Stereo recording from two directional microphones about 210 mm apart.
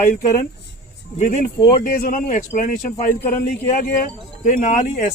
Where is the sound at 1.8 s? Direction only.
40° left (ahead or behind).